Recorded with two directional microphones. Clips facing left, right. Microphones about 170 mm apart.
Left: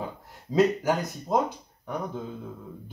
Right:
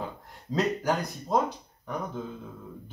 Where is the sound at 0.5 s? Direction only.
5° left (ahead or behind).